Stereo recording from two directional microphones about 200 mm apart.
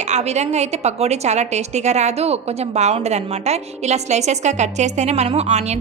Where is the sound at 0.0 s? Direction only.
35° right (ahead or behind).